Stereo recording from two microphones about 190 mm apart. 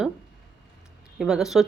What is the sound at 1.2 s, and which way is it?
Speech, centre (ahead or behind).